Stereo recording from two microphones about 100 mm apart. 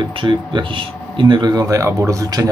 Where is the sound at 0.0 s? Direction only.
55° right (ahead or behind).